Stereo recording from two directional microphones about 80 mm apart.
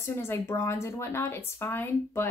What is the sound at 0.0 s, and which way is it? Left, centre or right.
Speech, left.